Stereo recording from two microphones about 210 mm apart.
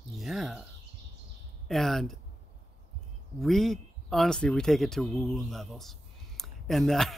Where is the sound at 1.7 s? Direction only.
Centre (ahead or behind).